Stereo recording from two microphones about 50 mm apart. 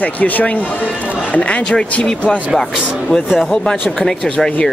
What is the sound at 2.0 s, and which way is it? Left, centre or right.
A man's voice, centre.